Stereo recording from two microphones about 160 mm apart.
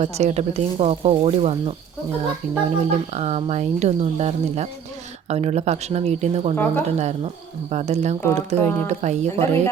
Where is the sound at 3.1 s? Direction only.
40° right (ahead or behind).